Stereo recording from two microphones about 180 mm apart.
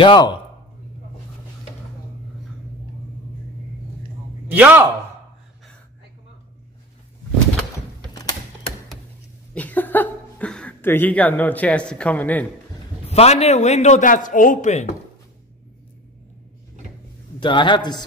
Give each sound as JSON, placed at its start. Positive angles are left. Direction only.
{"t": 0.0, "sound": "a man's voice", "side_deg": 25}
{"t": 4.5, "sound": "speech", "side_deg": -10}
{"t": 8.1, "sound": "a sound", "side_deg": 20}
{"t": 9.5, "sound": "speech", "side_deg": 10}
{"t": 13.1, "sound": "speech", "side_deg": 35}
{"t": 17.4, "sound": "a man's voice", "side_deg": 25}